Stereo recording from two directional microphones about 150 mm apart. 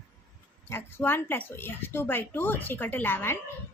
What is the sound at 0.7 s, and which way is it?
Speech, 15° left (ahead or behind).